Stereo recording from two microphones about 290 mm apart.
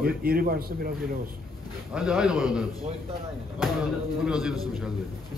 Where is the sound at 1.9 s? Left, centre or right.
Centre.